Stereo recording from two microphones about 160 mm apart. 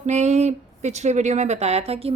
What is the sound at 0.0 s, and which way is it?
Speech, 45° right (ahead or behind).